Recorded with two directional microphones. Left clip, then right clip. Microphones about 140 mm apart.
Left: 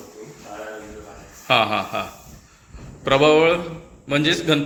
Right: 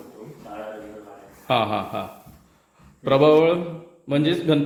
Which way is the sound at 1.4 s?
10° right (ahead or behind).